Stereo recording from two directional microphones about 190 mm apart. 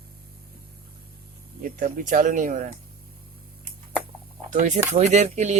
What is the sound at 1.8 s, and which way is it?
Speech, 45° right (ahead or behind).